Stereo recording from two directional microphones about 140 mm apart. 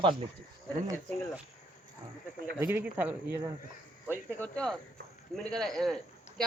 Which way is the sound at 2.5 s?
15° right (ahead or behind).